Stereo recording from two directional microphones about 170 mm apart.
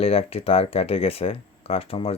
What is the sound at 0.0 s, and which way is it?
Speech, 35° left (ahead or behind).